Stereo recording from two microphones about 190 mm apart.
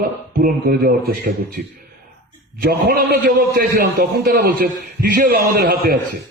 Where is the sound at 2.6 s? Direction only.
55° right (ahead or behind).